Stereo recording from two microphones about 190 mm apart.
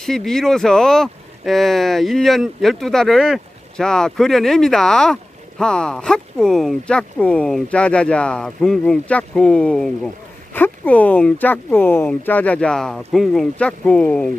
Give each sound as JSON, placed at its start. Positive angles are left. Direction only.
{"t": 0.0, "sound": "speech", "side_deg": 0}